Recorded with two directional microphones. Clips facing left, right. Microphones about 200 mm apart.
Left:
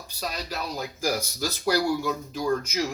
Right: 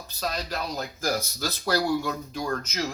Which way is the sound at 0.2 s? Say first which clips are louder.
Right 2 dB; 10° left (ahead or behind).